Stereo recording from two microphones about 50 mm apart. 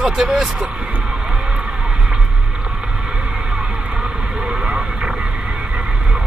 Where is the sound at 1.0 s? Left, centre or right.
Centre.